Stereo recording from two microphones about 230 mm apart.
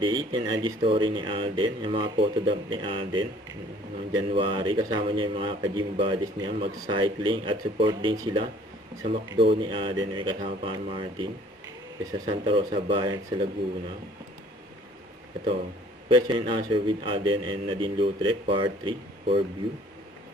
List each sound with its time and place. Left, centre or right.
0.0 s a man's voice: right
16.0 s a man's voice: right